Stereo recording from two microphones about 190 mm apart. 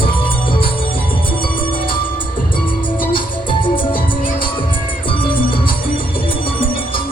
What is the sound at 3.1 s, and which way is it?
Music, 25° left (ahead or behind).